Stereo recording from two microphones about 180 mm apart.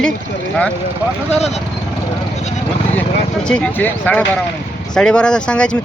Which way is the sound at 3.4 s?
5° left (ahead or behind).